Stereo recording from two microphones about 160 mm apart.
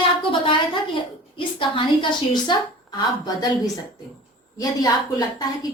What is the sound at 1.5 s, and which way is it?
A woman's voice, 30° left (ahead or behind).